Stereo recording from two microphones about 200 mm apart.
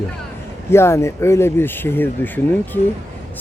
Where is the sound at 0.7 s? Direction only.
15° left (ahead or behind).